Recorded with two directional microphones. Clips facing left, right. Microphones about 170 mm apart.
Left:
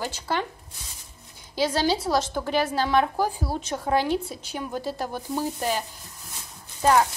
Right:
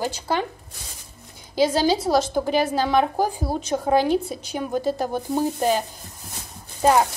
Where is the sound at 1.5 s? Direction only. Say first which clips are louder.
Right 4 dB; 15° right (ahead or behind).